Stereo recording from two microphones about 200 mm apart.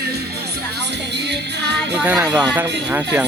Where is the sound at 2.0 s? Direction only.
10° right (ahead or behind).